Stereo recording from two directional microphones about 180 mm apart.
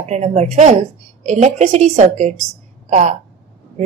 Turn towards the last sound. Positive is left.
turn(degrees=-40)  # may be behind; listen again after turning